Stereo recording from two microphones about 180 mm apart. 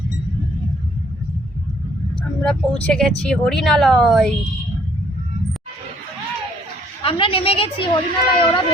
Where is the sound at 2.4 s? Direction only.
5° left (ahead or behind).